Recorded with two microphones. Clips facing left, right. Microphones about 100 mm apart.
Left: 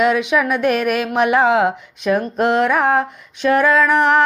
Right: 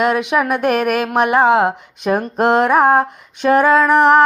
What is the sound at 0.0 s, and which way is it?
Speech, 50° right (ahead or behind).